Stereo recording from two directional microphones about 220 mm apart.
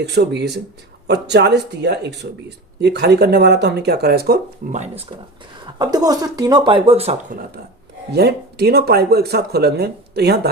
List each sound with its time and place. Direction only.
0.0 s speech: 50° right (ahead or behind)
4.7 s speech: 30° right (ahead or behind)
5.8 s speech: 15° right (ahead or behind); by 10.5 s 45° right (ahead or behind)